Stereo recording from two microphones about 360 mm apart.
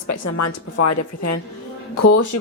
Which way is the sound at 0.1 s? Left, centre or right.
Left.